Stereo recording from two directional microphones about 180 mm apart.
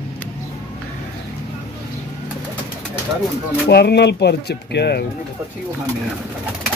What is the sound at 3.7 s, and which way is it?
Speech, 65° left (ahead or behind).